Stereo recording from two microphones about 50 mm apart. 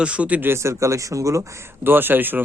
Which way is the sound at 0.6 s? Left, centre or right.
Right.